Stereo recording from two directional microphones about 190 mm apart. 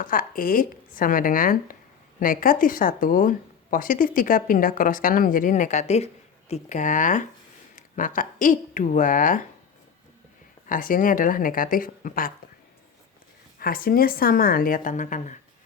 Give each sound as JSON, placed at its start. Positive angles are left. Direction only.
{"t": 0.0, "sound": "a woman's voice", "side_deg": 45}
{"t": 10.7, "sound": "speech", "side_deg": 45}
{"t": 13.6, "sound": "speech", "side_deg": 50}